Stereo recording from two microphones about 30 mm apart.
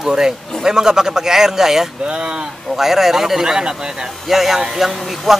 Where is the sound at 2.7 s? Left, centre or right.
Centre.